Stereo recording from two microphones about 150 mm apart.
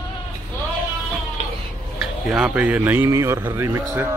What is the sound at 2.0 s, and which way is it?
Speech, 5° right (ahead or behind).